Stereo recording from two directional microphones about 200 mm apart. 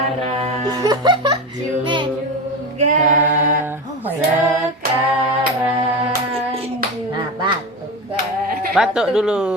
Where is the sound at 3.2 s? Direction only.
10° right (ahead or behind).